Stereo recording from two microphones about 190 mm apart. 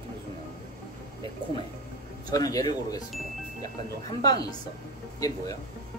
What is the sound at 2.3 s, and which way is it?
Speech, 20° left (ahead or behind).